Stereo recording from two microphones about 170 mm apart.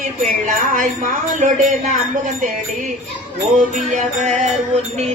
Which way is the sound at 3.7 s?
45° right (ahead or behind).